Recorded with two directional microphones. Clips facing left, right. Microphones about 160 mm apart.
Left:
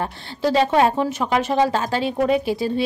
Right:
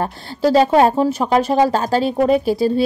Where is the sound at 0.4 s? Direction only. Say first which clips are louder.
Right 4 dB; 40° right (ahead or behind).